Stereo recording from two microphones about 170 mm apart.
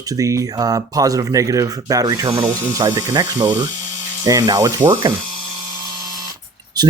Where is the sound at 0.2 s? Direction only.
20° right (ahead or behind).